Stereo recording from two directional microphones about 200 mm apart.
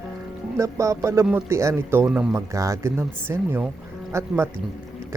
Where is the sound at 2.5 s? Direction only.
15° right (ahead or behind).